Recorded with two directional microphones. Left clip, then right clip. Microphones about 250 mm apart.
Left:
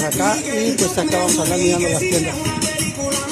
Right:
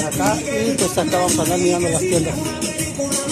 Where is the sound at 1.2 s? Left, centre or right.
Left.